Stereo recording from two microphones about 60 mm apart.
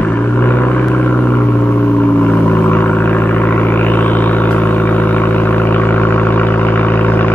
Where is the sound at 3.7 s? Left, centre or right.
Left.